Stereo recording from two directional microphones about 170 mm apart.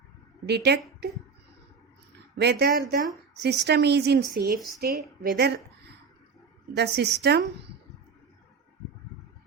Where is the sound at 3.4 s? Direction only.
75° right (ahead or behind).